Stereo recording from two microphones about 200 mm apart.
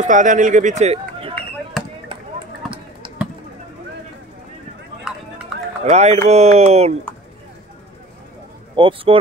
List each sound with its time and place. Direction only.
0.0 s speech: 40° right (ahead or behind)
5.1 s run: 5° right (ahead or behind)
5.9 s speech: 35° right (ahead or behind)
8.7 s speech: 25° right (ahead or behind)